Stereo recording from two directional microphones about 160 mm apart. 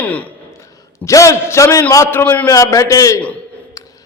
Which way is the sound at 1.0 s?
20° left (ahead or behind).